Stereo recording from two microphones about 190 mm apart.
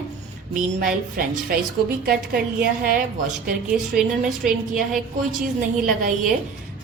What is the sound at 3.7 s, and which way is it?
Speech, 5° right (ahead or behind).